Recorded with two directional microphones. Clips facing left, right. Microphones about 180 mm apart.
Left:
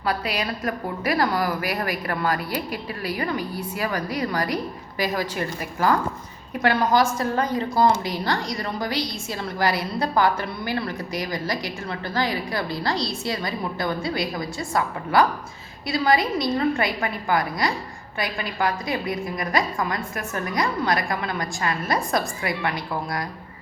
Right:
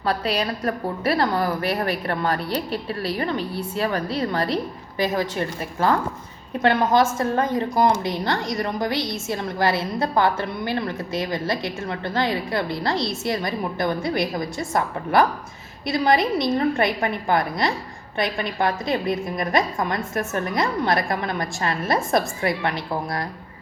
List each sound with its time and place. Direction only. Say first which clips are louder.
0.0 s a woman's voice: right 3 dB; 35° right (ahead or behind)